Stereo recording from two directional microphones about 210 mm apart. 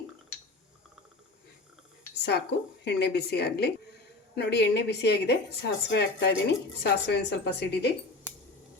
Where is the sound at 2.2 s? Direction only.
50° left (ahead or behind).